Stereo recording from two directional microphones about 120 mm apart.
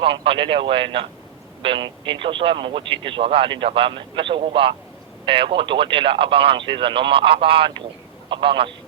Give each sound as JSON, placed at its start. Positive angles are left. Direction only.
{"t": 0.0, "sound": "speech", "side_deg": -45}